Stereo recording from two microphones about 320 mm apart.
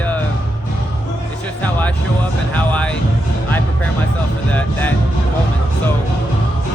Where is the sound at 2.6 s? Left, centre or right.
Centre.